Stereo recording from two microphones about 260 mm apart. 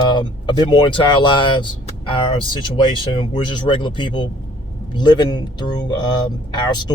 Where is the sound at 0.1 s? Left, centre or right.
Centre.